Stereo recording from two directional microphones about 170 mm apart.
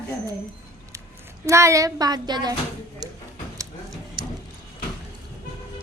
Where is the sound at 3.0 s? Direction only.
25° right (ahead or behind).